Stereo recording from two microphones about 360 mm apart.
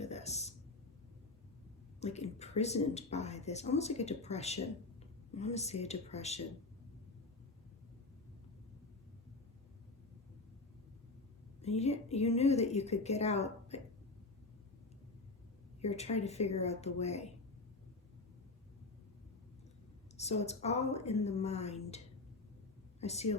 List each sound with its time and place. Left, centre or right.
0.0 s a sound: centre
2.0 s speech: centre
11.6 s speech: centre
15.8 s speech: centre
20.1 s speech: centre